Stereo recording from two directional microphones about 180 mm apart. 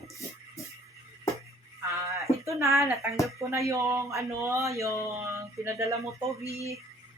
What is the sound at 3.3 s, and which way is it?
Speech, 15° right (ahead or behind).